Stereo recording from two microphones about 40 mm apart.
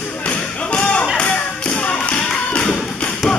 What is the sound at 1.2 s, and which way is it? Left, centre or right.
Tap, left.